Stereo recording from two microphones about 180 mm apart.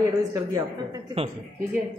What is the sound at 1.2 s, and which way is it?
Speech, 30° right (ahead or behind).